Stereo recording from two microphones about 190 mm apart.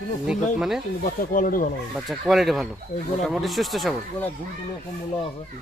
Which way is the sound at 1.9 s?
Centre (ahead or behind).